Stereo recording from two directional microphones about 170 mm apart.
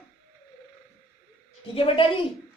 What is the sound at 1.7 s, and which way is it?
Speech, 30° left (ahead or behind).